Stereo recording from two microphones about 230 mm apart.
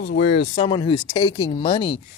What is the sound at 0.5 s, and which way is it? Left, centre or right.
Speech, centre.